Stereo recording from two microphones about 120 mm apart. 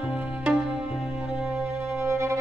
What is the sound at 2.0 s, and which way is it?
Music, 25° right (ahead or behind).